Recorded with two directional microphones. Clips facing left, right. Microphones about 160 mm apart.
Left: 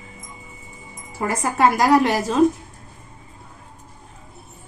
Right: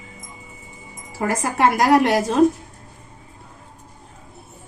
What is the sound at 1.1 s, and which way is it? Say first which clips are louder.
Speech: right 1 dB; 90° right.